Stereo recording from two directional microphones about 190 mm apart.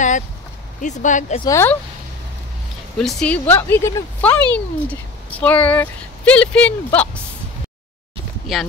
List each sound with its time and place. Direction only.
0.7 s speech: 40° left (ahead or behind)
1.4 s speech: 15° left (ahead or behind)
3.0 s speech: 5° left (ahead or behind)
8.5 s speech: centre (ahead or behind)